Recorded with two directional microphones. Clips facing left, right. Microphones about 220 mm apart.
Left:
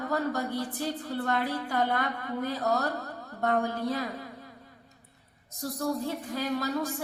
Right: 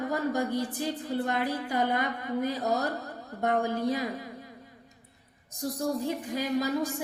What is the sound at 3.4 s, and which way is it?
Speech, 15° right (ahead or behind).